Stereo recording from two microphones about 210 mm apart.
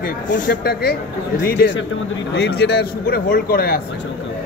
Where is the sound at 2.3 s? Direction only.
55° left (ahead or behind).